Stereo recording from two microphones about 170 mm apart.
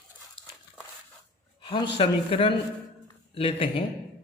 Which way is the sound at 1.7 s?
30° left (ahead or behind).